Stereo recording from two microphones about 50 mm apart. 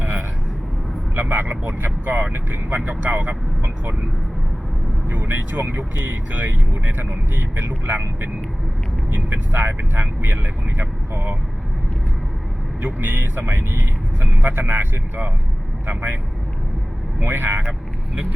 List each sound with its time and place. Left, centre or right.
1.1 s speech: right
5.0 s speech: right
9.0 s speech: right
12.8 s speech: right
17.2 s speech: right
17.7 s vehicle: right